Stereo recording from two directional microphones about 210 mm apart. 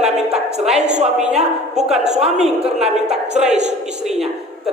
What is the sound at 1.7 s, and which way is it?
Speech, centre (ahead or behind).